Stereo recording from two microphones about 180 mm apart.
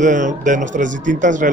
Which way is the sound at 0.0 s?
45° right (ahead or behind).